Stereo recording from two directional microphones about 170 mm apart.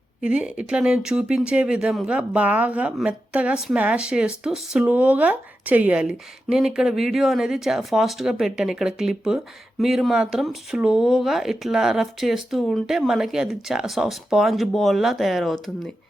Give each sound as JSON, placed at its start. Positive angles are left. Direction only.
{"t": 0.2, "sound": "speech", "side_deg": -5}